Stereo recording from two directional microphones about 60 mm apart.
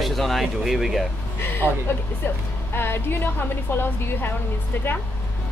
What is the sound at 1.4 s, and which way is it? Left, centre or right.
Speech, left.